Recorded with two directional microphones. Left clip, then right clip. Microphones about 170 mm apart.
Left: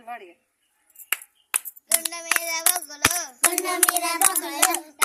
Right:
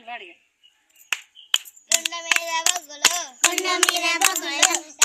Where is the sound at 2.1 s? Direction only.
5° right (ahead or behind).